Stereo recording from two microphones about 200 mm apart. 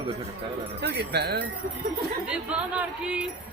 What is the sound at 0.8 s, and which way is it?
Speech, 55° right (ahead or behind).